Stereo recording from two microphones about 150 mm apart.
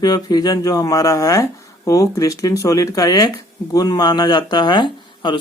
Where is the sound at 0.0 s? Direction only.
25° left (ahead or behind).